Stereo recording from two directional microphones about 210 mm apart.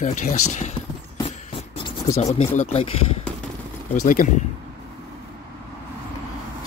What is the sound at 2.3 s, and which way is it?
Speech, 30° left (ahead or behind).